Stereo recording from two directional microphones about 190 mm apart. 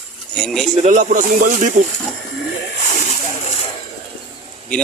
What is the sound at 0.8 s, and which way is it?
Speech, 40° right (ahead or behind).